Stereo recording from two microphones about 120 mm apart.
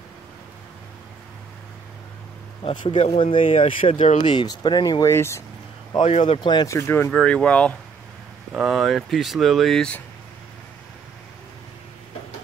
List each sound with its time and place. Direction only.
2.6 s speech: 45° left (ahead or behind)
5.0 s speech: 20° left (ahead or behind)
6.0 s speech: 65° left (ahead or behind)
6.4 s speech: 35° left (ahead or behind)
6.7 s speech: 20° left (ahead or behind)
7.1 s speech: 5° left (ahead or behind)
8.5 s speech: centre (ahead or behind)